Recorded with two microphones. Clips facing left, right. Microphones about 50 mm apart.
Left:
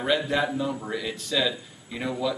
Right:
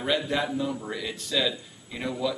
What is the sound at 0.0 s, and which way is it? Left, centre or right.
Speech, centre.